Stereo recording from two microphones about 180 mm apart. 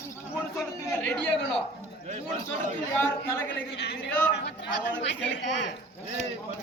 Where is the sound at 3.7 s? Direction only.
70° left (ahead or behind).